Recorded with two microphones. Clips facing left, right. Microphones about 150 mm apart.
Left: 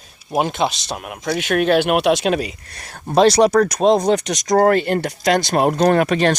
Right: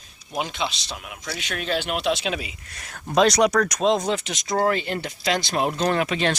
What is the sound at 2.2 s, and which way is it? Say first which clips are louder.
Speech: left 9 dB; 45° left (ahead or behind).